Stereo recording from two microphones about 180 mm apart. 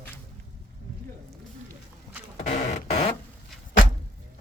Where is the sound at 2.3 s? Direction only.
40° left (ahead or behind).